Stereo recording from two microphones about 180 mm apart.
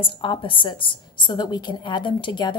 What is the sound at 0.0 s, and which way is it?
A woman's voice, 30° left (ahead or behind).